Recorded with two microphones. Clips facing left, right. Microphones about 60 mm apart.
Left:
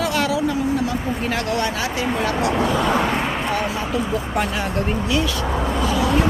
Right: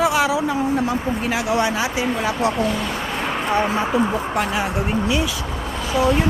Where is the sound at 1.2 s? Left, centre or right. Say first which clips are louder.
Right 2 dB; centre.